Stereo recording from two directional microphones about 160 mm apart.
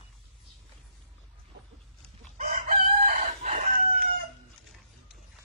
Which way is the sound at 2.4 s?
45° right (ahead or behind).